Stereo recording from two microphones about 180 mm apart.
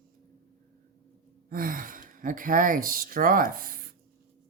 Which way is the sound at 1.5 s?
50° right (ahead or behind).